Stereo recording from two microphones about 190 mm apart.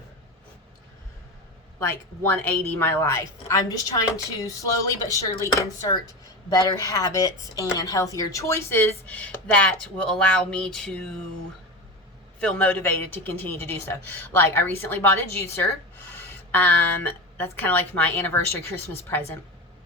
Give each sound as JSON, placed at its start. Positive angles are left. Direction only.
{"t": 1.8, "sound": "a woman's voice", "side_deg": 10}
{"t": 12.4, "sound": "a woman's voice", "side_deg": 5}